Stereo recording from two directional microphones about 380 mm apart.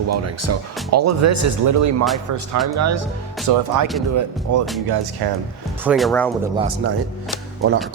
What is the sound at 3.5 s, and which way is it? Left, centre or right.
Speech, right.